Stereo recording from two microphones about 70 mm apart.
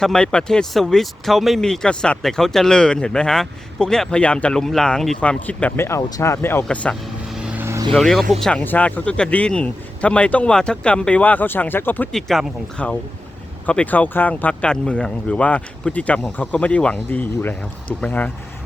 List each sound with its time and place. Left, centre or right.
0.0 s speech: centre
5.2 s speech: centre
5.7 s speech: left
6.0 s speech: left
6.2 s speech: left
7.3 s vehicle: centre
7.9 s speech: centre
8.6 s speech: left
12.1 s speech: centre
12.7 s speech: centre
14.7 s speech: centre